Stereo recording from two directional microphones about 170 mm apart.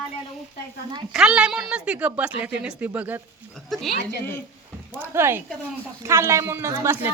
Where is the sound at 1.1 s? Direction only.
5° right (ahead or behind).